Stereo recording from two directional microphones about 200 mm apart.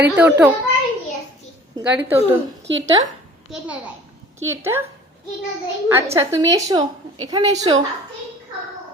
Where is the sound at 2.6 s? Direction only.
65° right (ahead or behind).